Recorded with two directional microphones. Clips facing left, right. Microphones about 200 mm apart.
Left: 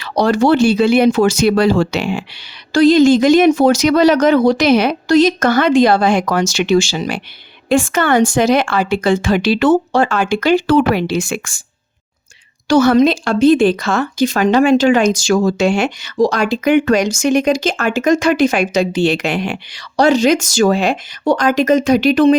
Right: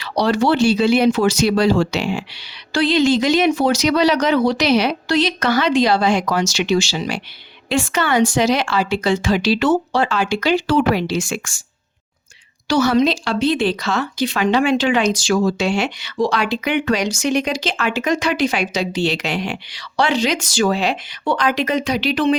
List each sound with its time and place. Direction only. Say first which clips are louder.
0.0 s speech: left 4 dB; 45° left (ahead or behind)
2.7 s speech: left 7 dB; 45° left (ahead or behind)
12.6 s speech: left 5 dB; 50° left (ahead or behind)